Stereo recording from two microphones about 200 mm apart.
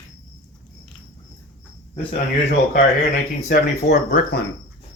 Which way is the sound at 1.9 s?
25° left (ahead or behind).